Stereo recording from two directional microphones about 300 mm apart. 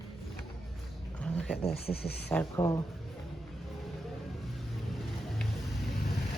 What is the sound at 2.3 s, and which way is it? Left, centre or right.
Speech, centre.